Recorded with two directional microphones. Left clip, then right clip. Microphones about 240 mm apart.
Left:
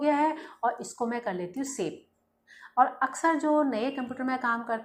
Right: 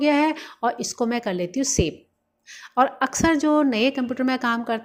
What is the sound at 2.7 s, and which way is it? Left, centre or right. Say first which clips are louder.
A woman's voice: right 4 dB; right.